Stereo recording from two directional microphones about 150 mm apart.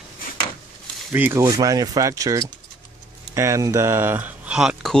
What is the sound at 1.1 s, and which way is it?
Speech, 15° right (ahead or behind).